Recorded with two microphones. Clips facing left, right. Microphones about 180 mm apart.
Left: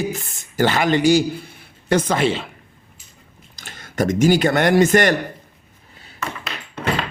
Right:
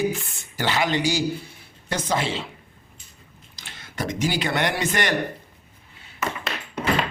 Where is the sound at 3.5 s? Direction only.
45° left (ahead or behind).